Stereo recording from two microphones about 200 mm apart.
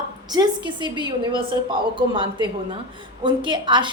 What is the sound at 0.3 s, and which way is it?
A woman's voice, 20° right (ahead or behind).